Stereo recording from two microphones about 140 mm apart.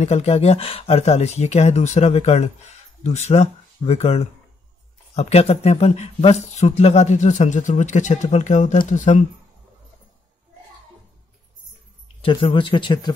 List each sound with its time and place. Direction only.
0.0 s speech: 50° left (ahead or behind)
12.2 s speech: 40° left (ahead or behind)